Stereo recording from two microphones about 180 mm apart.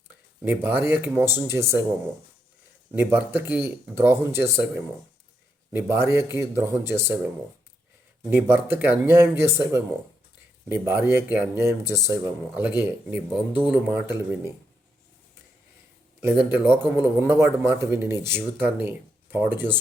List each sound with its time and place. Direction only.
0.4 s a man's voice: 10° right (ahead or behind)
2.9 s a man's voice: 10° right (ahead or behind)
8.3 s a man's voice: 10° right (ahead or behind)
11.9 s speech: 20° left (ahead or behind)
12.2 s a man's voice: 10° right (ahead or behind)
16.2 s a man's voice: 10° right (ahead or behind)